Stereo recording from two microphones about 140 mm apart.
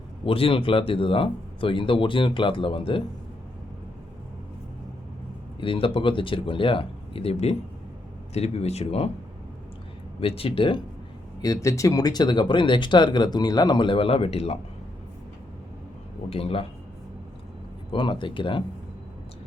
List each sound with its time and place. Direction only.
0.3 s speech: 40° left (ahead or behind)
5.5 s speech: 40° left (ahead or behind)
10.2 s speech: 45° left (ahead or behind)
11.4 s speech: 20° left (ahead or behind); by 14.6 s 45° left (ahead or behind)
16.3 s speech: 45° left (ahead or behind)
17.9 s speech: 35° left (ahead or behind)